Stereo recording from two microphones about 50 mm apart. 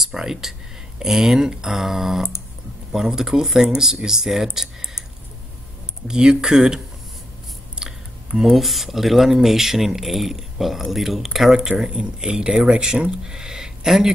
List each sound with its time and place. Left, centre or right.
0.0 s speech: centre
6.0 s speech: centre
7.8 s a sound: centre
8.5 s speech: centre